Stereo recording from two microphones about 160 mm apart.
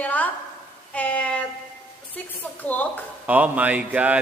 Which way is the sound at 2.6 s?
10° left (ahead or behind).